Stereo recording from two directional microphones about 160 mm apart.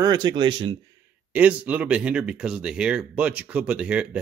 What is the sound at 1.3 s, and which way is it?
Speech, 10° right (ahead or behind).